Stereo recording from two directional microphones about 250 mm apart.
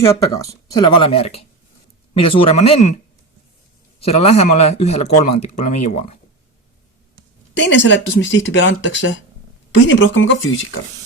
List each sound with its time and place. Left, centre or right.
0.0 s speech: centre; by 2.9 s left
4.0 s speech: left
7.6 s speech: left